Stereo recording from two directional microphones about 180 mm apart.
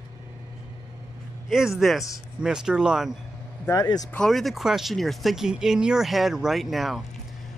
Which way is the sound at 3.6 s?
20° left (ahead or behind).